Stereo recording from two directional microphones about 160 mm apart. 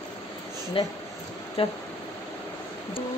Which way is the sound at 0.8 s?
35° left (ahead or behind).